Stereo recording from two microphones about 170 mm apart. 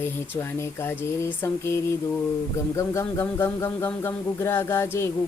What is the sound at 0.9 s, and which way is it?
Speech, 15° left (ahead or behind).